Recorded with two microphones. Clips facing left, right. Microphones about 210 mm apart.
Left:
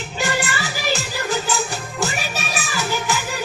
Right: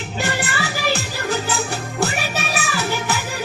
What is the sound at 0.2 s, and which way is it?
Music, 60° right (ahead or behind).